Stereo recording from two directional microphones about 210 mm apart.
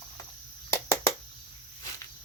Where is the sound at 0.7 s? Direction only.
10° left (ahead or behind).